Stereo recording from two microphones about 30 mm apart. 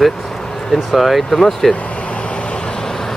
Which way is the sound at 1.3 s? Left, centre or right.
Centre.